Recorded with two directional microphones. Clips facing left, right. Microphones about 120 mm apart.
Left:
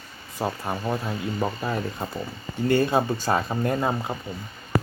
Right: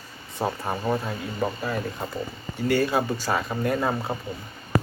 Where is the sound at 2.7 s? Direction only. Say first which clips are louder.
Left 2 dB; 25° left (ahead or behind).